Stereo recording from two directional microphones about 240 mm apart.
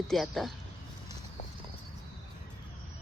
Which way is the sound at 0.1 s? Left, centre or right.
Centre.